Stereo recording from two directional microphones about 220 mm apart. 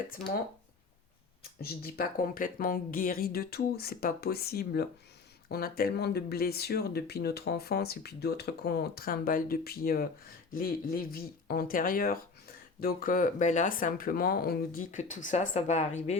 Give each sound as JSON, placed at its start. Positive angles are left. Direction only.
{"t": 1.6, "sound": "speech", "side_deg": 45}